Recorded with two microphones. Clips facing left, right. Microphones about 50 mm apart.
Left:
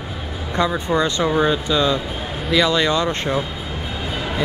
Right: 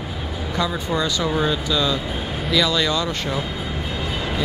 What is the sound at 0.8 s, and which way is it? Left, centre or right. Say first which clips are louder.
Speech: left 3 dB; left.